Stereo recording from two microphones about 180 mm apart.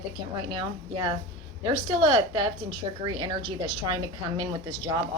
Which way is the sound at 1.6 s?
20° right (ahead or behind).